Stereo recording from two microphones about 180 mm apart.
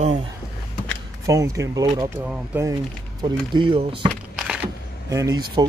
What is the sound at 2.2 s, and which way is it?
Speech, 10° right (ahead or behind).